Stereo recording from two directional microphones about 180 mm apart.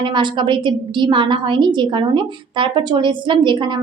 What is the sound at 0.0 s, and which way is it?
A woman's voice, 25° right (ahead or behind).